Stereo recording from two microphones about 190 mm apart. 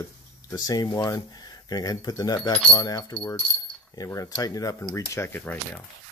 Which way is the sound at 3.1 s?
5° left (ahead or behind).